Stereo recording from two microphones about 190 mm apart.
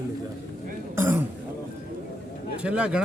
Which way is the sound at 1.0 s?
10° right (ahead or behind).